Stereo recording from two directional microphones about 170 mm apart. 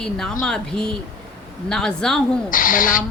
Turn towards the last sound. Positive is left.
turn(degrees=55)  # may be behind; listen again after turning